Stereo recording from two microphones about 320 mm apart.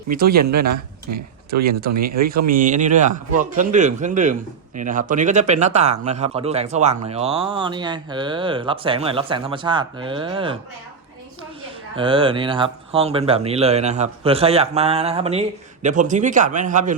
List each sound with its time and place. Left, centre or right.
0.1 s speech: right
2.5 s speech: right
11.9 s speech: centre